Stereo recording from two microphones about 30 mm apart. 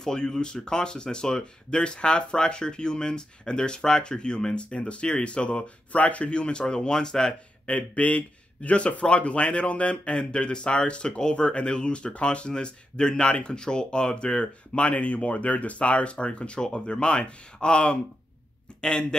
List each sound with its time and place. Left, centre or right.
0.0 s speech: centre
4.6 s speech: left
5.9 s speech: left
6.3 s speech: left
7.6 s speech: left